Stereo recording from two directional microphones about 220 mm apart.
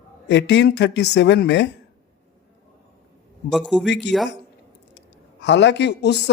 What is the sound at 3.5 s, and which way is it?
Speech, centre (ahead or behind).